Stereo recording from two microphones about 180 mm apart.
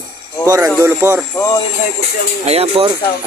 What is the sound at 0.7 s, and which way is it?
Speech, 15° right (ahead or behind).